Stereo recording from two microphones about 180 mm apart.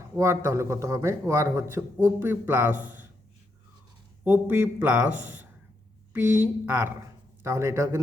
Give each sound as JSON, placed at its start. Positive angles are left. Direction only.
{"t": 0.2, "sound": "a man's voice", "side_deg": -15}
{"t": 4.2, "sound": "a man's voice", "side_deg": -10}